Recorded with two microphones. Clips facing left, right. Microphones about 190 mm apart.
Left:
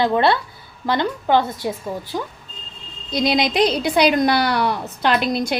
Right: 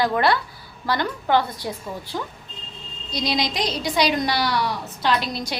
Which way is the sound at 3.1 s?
55° left (ahead or behind).